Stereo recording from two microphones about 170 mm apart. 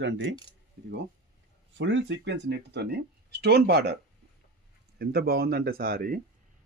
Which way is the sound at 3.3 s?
75° right (ahead or behind).